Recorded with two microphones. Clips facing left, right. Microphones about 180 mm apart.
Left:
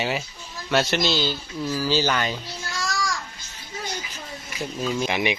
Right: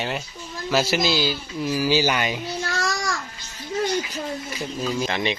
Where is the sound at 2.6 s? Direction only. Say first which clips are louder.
Right 1 dB; 60° right (ahead or behind).